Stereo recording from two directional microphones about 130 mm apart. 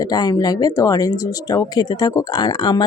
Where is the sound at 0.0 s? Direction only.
30° left (ahead or behind).